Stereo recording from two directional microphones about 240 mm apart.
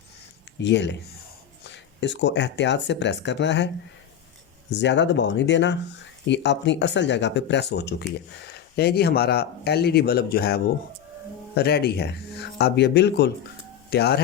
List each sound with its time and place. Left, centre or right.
0.6 s speech: left
4.7 s speech: left